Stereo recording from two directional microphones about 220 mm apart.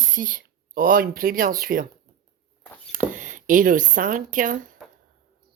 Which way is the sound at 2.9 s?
35° right (ahead or behind).